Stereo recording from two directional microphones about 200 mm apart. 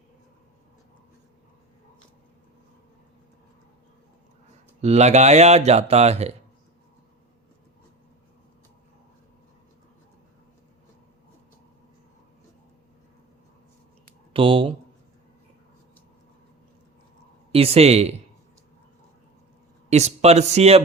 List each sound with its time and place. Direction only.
4.8 s speech: 35° right (ahead or behind)
14.3 s speech: 25° right (ahead or behind)
17.5 s speech: 30° right (ahead or behind)
19.9 s speech: 35° right (ahead or behind)